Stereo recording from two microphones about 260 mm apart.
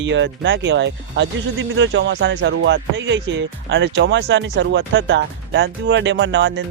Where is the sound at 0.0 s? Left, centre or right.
Right.